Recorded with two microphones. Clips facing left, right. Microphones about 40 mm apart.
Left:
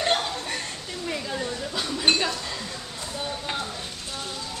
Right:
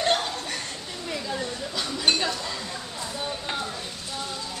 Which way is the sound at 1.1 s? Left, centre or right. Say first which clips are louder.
Even; centre.